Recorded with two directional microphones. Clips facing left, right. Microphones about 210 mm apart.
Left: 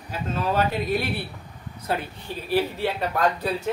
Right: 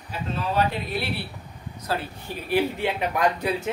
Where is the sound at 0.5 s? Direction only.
45° left (ahead or behind).